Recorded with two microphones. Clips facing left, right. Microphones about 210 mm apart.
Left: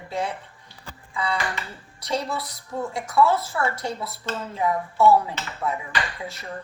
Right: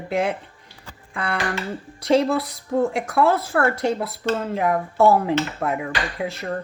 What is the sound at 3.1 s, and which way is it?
A woman's voice, 55° right (ahead or behind).